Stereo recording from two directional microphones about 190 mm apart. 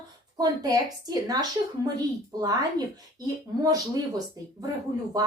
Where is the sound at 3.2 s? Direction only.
20° right (ahead or behind).